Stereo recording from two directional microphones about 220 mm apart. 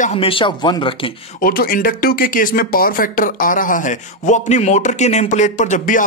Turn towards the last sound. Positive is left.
turn(degrees=35)  # may be behind; listen again after turning